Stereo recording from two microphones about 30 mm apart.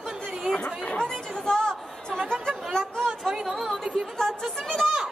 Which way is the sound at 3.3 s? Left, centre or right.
Right.